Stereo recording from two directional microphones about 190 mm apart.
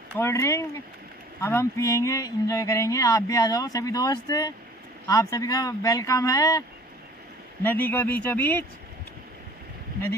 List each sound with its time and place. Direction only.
0.1 s speech: 15° left (ahead or behind)
7.6 s speech: 10° left (ahead or behind)